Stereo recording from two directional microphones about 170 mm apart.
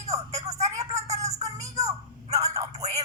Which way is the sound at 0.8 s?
40° right (ahead or behind).